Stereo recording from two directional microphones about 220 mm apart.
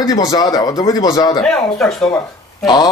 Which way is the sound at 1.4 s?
5° left (ahead or behind).